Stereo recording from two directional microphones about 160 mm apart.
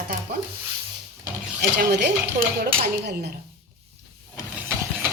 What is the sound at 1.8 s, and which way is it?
Speech, 90° right.